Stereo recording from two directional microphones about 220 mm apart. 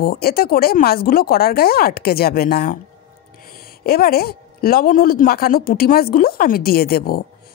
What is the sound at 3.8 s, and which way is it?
Speech, 45° left (ahead or behind).